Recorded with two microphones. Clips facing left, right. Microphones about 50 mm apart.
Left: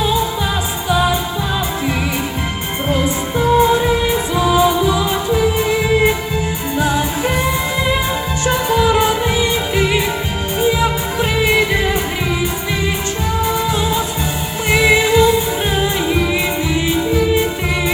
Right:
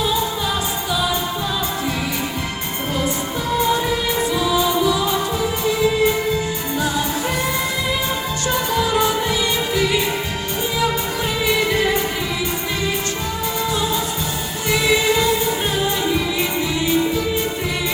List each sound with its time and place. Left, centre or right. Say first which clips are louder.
2.9 s music: left 5 dB; left
4.9 s music: left 3 dB; left
8.7 s music: left 5 dB; left
11.2 s music: left 6 dB; left
13.4 s music: left 4 dB; left